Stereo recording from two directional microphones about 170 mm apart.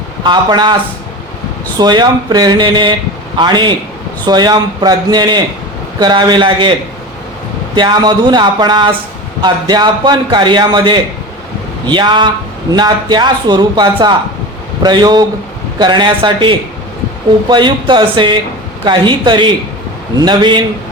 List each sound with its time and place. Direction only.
0.3 s a man's voice: 25° right (ahead or behind)
1.8 s a man's voice: 25° right (ahead or behind)
7.8 s a man's voice: 25° right (ahead or behind)